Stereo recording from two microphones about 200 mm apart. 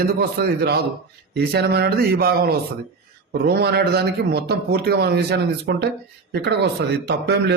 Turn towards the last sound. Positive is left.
turn(degrees=-55)  # may be behind; listen again after turning